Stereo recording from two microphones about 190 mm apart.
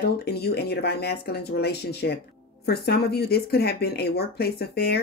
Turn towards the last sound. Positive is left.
turn(degrees=55)  # may be behind; listen again after turning